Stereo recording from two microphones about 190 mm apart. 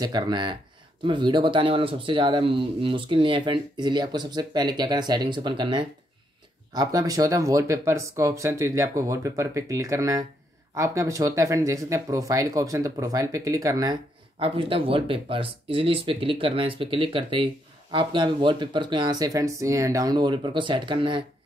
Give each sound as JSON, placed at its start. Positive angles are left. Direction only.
{"t": 0.0, "sound": "speech", "side_deg": -25}